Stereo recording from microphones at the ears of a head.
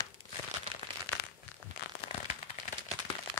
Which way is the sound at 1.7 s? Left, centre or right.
Left.